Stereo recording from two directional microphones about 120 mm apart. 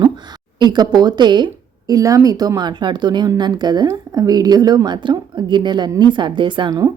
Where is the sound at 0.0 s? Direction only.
40° right (ahead or behind).